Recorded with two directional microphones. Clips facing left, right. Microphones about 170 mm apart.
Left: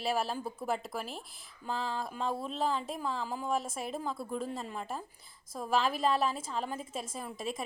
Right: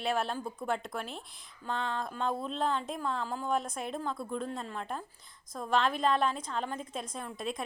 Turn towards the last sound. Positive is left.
turn(degrees=0)  # may be behind; listen again after turning